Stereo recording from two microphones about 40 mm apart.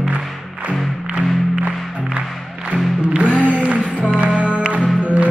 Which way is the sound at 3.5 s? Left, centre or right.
Right.